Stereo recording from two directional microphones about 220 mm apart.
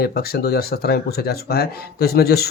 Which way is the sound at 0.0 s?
45° left (ahead or behind).